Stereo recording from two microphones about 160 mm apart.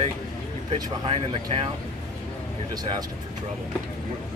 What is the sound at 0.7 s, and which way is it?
Speech, 30° right (ahead or behind).